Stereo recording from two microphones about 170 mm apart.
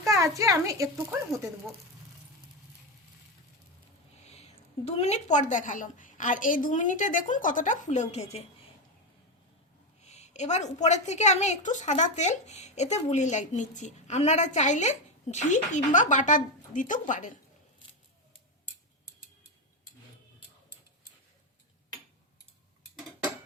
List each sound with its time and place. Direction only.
0.0 s speech: 20° right (ahead or behind)
4.9 s a woman's voice: 40° left (ahead or behind)
10.1 s a woman's voice: 40° left (ahead or behind)